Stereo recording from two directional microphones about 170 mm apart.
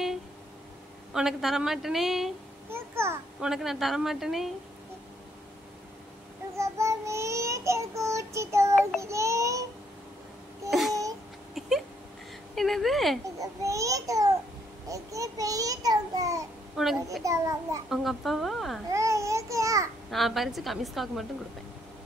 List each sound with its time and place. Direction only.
1.1 s a woman's voice: centre (ahead or behind)
2.7 s a sound: 15° right (ahead or behind)
3.3 s a woman's voice: centre (ahead or behind)
6.5 s child singing: 15° right (ahead or behind)
10.7 s babbling: centre (ahead or behind)
12.5 s a woman's voice: centre (ahead or behind)
13.4 s a child's voice: 20° right (ahead or behind)
16.7 s a woman's voice: centre (ahead or behind)
17.2 s a child's voice: 20° right (ahead or behind)
17.8 s a woman's voice: centre (ahead or behind)
18.9 s babbling: 20° right (ahead or behind)
20.1 s a woman's voice: centre (ahead or behind)